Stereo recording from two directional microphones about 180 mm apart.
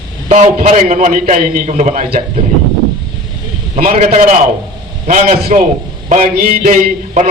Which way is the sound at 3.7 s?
45° right (ahead or behind).